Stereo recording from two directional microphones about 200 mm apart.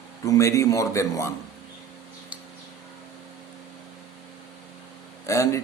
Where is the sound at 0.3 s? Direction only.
15° left (ahead or behind).